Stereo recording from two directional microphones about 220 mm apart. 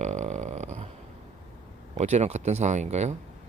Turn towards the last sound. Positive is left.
turn(degrees=-30)  # may be behind; listen again after turning